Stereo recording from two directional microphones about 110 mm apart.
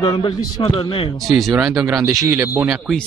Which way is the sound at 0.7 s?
55° left (ahead or behind).